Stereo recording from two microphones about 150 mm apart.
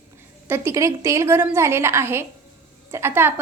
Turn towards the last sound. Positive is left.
turn(degrees=-15)  # may be behind; listen again after turning